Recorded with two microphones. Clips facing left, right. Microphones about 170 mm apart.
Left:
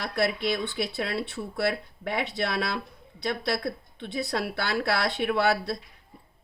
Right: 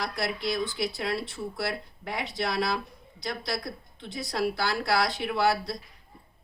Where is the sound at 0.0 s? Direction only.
60° left (ahead or behind).